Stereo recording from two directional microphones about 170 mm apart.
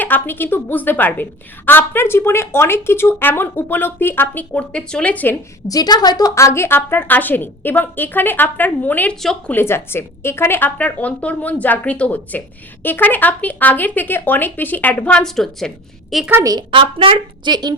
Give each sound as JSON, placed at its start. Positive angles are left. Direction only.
{"t": 0.0, "sound": "a woman's voice", "side_deg": 10}
{"t": 16.3, "sound": "a woman's voice", "side_deg": -20}